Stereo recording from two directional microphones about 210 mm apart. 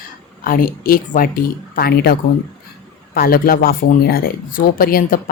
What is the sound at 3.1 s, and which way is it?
Speech, 45° left (ahead or behind).